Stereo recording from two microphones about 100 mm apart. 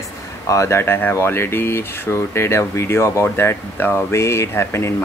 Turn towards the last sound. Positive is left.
turn(degrees=25)  # may be behind; listen again after turning